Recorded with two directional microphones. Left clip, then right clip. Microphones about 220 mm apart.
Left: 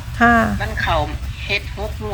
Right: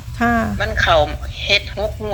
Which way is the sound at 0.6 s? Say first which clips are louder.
Right 5 dB; 50° right (ahead or behind).